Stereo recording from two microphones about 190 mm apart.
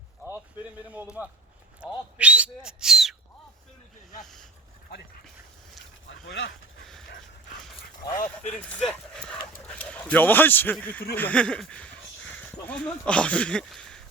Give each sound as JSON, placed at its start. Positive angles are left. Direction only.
{"t": 1.8, "sound": "owl", "side_deg": -5}
{"t": 6.1, "sound": "a sound", "side_deg": 80}
{"t": 8.0, "sound": "dog", "side_deg": 45}
{"t": 8.5, "sound": "speech", "side_deg": 5}